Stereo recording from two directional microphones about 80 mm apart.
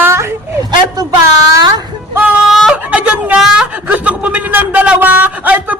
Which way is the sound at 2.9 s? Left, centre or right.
Centre.